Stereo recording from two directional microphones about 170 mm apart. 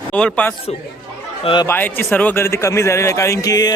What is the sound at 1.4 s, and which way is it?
Speech, 30° left (ahead or behind).